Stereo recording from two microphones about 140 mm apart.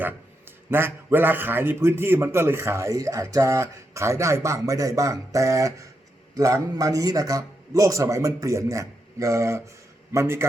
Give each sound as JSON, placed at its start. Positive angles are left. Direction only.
{"t": 0.7, "sound": "a man's voice", "side_deg": -15}